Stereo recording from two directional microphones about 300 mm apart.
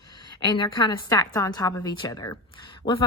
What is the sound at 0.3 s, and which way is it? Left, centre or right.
A woman's voice, centre.